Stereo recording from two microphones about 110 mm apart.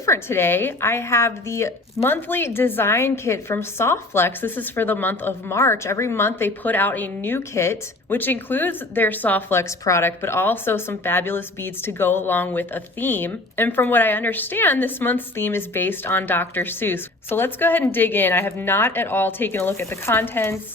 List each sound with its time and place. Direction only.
0.0 s a woman's voice: 25° left (ahead or behind)